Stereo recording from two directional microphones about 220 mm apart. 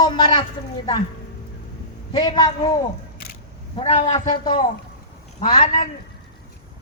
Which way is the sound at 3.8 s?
25° left (ahead or behind).